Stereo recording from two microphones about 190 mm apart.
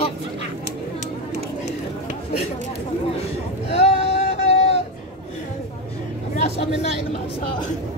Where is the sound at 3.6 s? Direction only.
35° left (ahead or behind).